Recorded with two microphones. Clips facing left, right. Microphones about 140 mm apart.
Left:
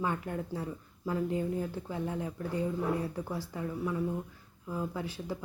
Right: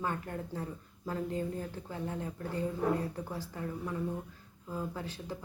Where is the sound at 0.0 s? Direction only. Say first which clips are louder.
Left 3 dB; 15° left (ahead or behind).